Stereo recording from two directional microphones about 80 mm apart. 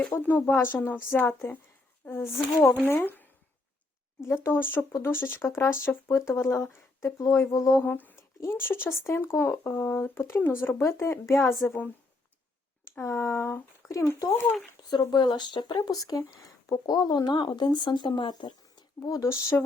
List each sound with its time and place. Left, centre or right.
0.1 s a woman's voice: left
4.4 s a woman's voice: left
7.8 s speech: left
11.6 s a woman's voice: centre
13.0 s speech: left
14.8 s speech: left
15.8 s speech: left
19.1 s speech: left